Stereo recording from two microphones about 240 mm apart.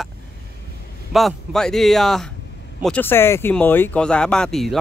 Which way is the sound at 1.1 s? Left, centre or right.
Centre.